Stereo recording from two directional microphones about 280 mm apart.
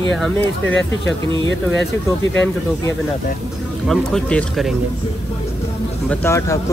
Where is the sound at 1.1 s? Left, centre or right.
Left.